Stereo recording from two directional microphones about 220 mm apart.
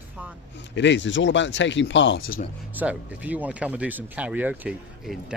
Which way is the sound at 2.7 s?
5° right (ahead or behind).